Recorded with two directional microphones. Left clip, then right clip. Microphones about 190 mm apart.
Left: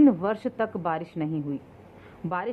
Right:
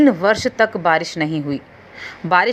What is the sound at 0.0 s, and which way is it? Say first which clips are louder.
A woman's voice: right 8 dB; 20° right (ahead or behind).